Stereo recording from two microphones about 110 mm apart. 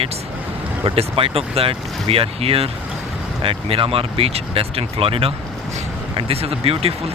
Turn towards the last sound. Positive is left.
turn(degrees=-60)  # may be behind; listen again after turning